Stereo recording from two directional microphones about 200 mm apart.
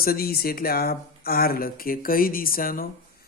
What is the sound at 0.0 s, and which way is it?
Speech, 50° left (ahead or behind).